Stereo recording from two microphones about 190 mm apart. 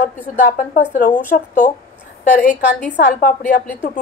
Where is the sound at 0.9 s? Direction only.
45° left (ahead or behind).